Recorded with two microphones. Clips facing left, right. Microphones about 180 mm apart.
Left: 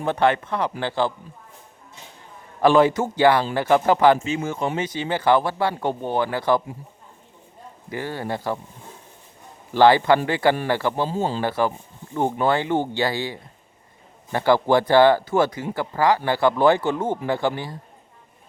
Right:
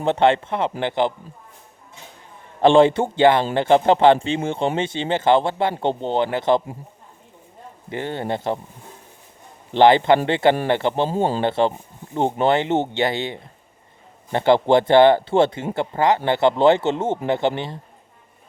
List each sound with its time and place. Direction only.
0.0 s speech: 25° right (ahead or behind)
2.6 s speech: 25° right (ahead or behind)
7.9 s speech: 25° right (ahead or behind)
9.7 s speech: 20° right (ahead or behind)